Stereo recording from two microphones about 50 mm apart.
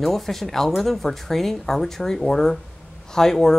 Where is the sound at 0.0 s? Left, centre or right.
Centre.